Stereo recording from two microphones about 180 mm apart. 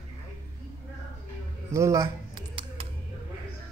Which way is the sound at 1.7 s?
15° right (ahead or behind).